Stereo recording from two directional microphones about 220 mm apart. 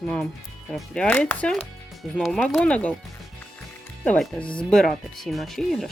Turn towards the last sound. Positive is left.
turn(degrees=0)  # may be behind; listen again after turning